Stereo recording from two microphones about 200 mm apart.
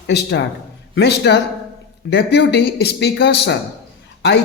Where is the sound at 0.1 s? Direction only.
55° left (ahead or behind).